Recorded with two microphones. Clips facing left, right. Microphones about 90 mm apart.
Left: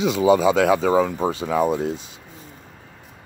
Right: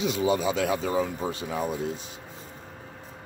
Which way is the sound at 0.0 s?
90° left.